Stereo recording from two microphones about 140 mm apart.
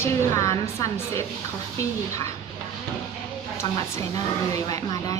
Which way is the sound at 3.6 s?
20° left (ahead or behind).